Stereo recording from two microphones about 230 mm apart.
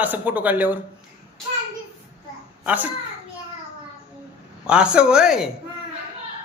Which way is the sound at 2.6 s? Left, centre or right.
Centre.